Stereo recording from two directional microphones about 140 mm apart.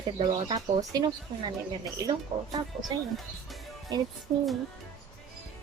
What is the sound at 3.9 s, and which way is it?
Speech, 30° right (ahead or behind).